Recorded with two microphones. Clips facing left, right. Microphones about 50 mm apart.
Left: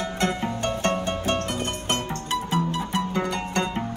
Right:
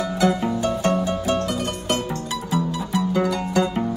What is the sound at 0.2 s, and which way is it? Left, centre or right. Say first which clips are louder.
Music: right 6 dB; left.